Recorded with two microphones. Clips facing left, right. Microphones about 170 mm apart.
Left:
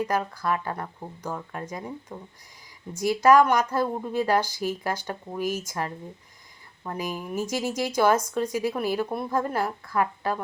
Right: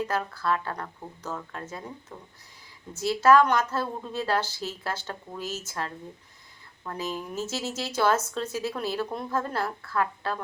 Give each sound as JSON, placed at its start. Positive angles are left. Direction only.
{"t": 0.0, "sound": "a woman's voice", "side_deg": 15}